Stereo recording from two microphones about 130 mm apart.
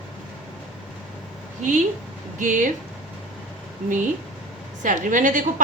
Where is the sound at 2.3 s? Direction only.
80° right.